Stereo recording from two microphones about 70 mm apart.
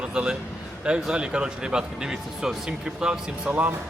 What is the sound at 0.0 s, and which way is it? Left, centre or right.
A man's voice, centre.